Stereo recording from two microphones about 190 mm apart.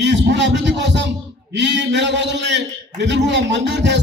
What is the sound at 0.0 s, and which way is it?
Music, 70° right (ahead or behind).